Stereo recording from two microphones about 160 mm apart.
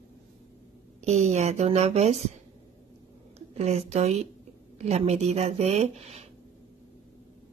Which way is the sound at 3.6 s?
40° right (ahead or behind).